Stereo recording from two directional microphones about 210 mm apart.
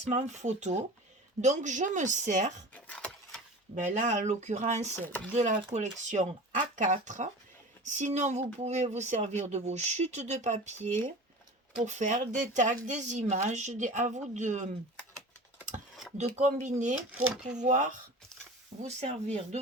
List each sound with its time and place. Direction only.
0.1 s speech: 35° right (ahead or behind)
2.7 s a sound: 5° left (ahead or behind)
3.8 s speech: 35° right (ahead or behind)
5.0 s speech: 10° left (ahead or behind)
5.3 s speech: 30° right (ahead or behind)
16.1 s speech: 30° right (ahead or behind)